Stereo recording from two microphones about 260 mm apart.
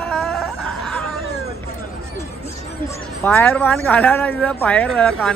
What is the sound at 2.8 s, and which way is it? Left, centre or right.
Speech, centre.